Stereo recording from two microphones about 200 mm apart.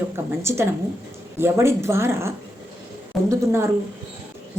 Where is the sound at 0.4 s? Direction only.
15° right (ahead or behind).